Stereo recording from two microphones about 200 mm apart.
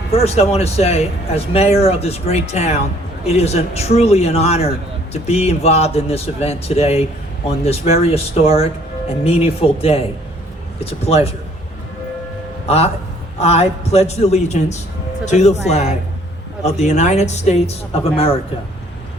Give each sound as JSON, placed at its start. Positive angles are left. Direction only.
{"t": 0.1, "sound": "a man's voice", "side_deg": 30}
{"t": 12.6, "sound": "a man's voice", "side_deg": 30}